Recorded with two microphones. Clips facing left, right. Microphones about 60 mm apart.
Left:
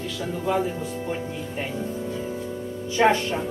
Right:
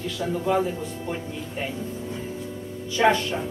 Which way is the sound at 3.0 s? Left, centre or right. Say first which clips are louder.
Left 1 dB; left.